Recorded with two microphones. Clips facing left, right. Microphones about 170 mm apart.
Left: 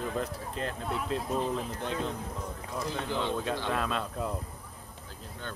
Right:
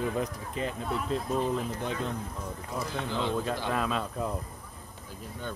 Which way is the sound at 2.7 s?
5° right (ahead or behind).